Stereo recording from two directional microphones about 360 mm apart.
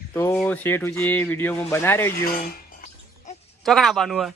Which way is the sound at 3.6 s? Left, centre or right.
Centre.